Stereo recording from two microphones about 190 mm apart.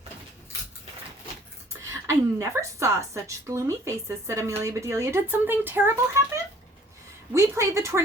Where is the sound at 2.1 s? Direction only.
15° right (ahead or behind).